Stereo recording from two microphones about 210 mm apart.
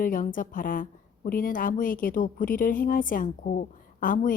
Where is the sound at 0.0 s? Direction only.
40° left (ahead or behind).